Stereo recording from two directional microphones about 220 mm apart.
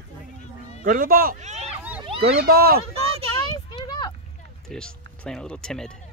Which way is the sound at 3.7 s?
20° left (ahead or behind).